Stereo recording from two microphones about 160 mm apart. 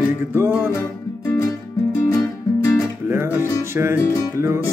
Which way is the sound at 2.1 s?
20° left (ahead or behind).